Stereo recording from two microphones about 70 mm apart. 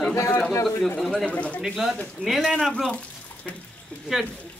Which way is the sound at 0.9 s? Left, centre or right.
Centre.